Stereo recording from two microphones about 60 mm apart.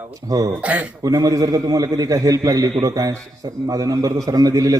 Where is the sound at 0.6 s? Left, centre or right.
Right.